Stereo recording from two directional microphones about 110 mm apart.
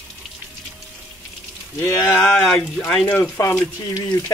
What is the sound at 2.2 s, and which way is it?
Speech, 10° left (ahead or behind).